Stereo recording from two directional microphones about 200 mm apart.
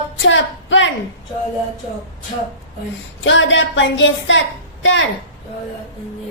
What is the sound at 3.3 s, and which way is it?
A woman's voice, 65° left (ahead or behind).